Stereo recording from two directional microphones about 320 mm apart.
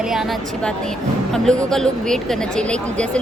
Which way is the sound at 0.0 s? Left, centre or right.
Centre.